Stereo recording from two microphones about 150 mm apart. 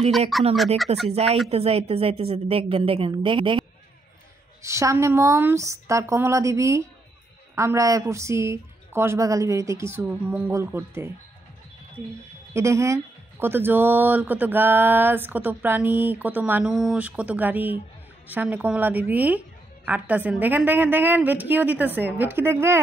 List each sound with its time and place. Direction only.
0.3 s speech: centre (ahead or behind)
1.1 s a woman's voice: 45° right (ahead or behind)
4.6 s a woman's voice: 20° right (ahead or behind)
12.5 s a woman's voice: 20° right (ahead or behind)